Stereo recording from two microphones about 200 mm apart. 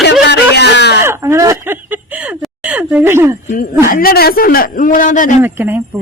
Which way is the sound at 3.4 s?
45° left (ahead or behind).